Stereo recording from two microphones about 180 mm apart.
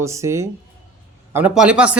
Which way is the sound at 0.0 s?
15° right (ahead or behind).